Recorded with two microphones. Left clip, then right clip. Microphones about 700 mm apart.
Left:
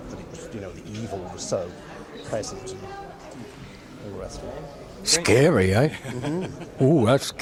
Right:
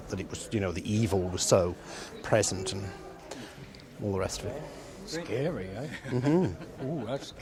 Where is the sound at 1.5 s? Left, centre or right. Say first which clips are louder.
Right 3 dB; right.